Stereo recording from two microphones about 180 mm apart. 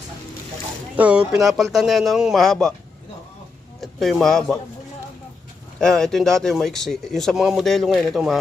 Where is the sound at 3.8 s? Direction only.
Centre (ahead or behind).